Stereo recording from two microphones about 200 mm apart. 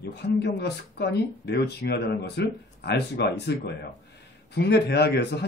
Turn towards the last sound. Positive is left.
turn(degrees=55)  # may be behind; listen again after turning